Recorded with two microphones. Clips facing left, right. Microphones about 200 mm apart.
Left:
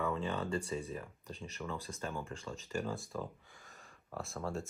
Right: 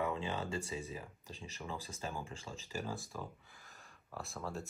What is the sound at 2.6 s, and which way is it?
Speech, 5° right (ahead or behind).